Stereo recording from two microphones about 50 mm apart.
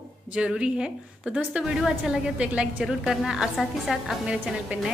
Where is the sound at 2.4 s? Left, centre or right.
Right.